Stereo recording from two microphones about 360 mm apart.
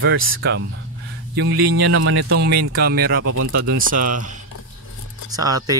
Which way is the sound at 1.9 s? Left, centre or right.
Right.